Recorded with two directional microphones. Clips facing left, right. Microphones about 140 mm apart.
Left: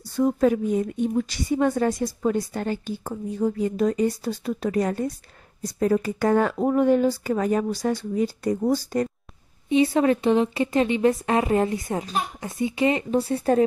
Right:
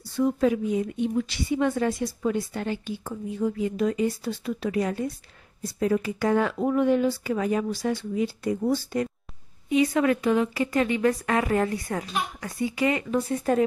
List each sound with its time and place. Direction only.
0.1 s a woman's voice: 45° left (ahead or behind)
9.7 s speech: 30° left (ahead or behind)